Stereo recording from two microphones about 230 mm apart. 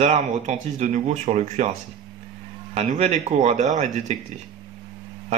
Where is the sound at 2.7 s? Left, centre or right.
Right.